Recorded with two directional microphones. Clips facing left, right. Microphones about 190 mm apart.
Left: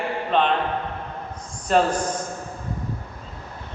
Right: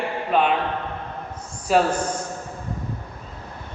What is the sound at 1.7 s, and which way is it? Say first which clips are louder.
Speech: even; 5° right (ahead or behind).